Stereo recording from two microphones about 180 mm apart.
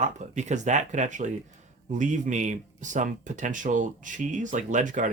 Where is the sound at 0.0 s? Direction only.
40° right (ahead or behind).